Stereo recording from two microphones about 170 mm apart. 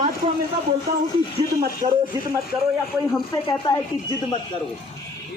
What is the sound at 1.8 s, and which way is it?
Speech, 40° right (ahead or behind).